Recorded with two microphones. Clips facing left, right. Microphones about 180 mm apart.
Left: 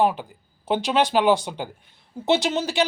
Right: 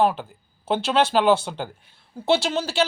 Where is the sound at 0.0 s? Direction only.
15° left (ahead or behind).